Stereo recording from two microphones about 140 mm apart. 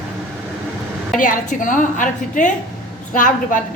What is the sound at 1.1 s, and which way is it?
A woman's voice, 70° left (ahead or behind).